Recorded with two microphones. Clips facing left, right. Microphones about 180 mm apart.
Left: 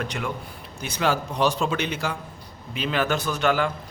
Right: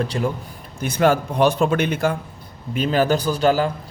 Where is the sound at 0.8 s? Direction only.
50° right (ahead or behind).